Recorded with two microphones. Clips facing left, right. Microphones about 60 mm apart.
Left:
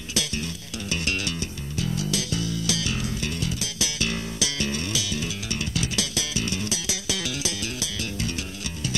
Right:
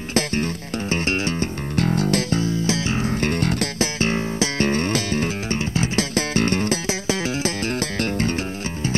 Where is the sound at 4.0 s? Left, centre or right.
Right.